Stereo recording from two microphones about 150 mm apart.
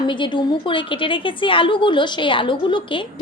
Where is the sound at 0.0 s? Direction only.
30° left (ahead or behind).